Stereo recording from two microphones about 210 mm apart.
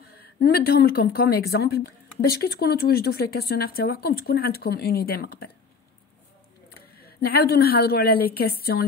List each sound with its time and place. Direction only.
0.2 s a woman's voice: 45° left (ahead or behind)
7.0 s a woman's voice: 45° left (ahead or behind)